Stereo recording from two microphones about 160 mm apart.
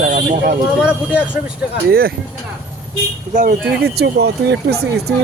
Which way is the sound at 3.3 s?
55° right (ahead or behind).